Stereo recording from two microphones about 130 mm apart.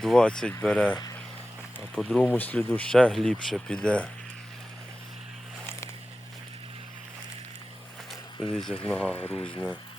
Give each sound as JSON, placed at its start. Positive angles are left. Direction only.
{"t": 0.0, "sound": "speech", "side_deg": 5}
{"t": 2.0, "sound": "speech", "side_deg": 10}
{"t": 8.5, "sound": "speech", "side_deg": 5}
{"t": 9.3, "sound": "speech", "side_deg": 40}